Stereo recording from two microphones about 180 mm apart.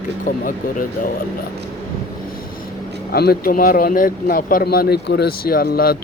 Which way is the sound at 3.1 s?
60° left (ahead or behind).